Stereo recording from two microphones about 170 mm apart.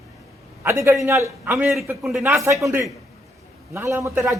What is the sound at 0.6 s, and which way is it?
A man's voice, 15° right (ahead or behind).